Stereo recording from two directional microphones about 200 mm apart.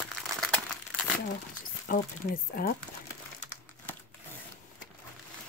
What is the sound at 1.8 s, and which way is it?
Speech, 40° left (ahead or behind).